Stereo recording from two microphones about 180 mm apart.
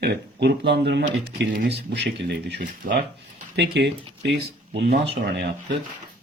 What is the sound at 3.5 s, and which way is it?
Speech, 70° right (ahead or behind).